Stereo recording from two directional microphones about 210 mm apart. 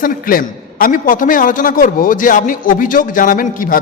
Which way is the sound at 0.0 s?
45° left (ahead or behind).